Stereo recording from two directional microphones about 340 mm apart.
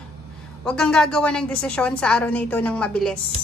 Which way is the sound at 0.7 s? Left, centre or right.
Centre.